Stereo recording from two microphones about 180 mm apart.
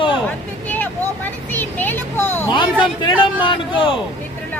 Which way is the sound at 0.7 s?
10° left (ahead or behind).